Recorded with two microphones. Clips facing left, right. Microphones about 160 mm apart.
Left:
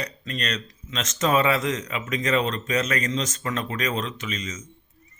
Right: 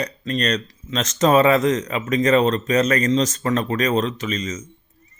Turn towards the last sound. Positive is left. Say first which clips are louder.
# right 7 dB
turn(degrees=-40)  # may be behind; listen again after turning